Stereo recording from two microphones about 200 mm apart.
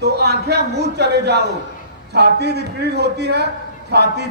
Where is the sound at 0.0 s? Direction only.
55° right (ahead or behind).